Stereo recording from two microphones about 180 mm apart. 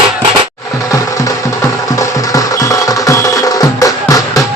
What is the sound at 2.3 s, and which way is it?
Music, 20° left (ahead or behind).